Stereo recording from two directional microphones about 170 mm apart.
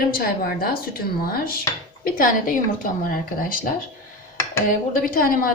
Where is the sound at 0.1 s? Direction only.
60° left (ahead or behind).